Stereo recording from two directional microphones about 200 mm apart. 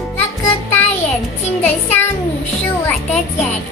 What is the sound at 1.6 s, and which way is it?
Child singing, 10° left (ahead or behind).